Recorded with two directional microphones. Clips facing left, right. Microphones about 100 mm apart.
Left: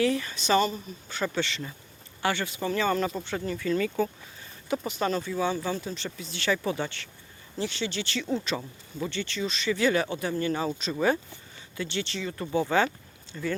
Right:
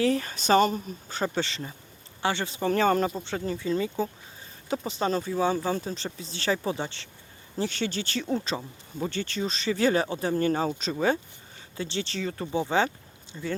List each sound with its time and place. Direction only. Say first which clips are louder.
0.0 s speech: right 1 dB; 40° right (ahead or behind)
2.6 s speech: right 4 dB; 45° right (ahead or behind)
3.2 s speech: even; 35° right (ahead or behind)
7.6 s speech: right 2 dB; 45° right (ahead or behind)
11.0 s speech: even; 30° right (ahead or behind)
12.5 s speech: left 1 dB; 20° right (ahead or behind)